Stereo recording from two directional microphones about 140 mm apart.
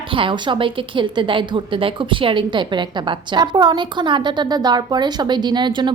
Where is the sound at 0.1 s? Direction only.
35° right (ahead or behind).